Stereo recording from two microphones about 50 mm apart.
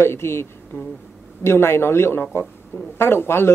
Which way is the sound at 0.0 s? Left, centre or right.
Left.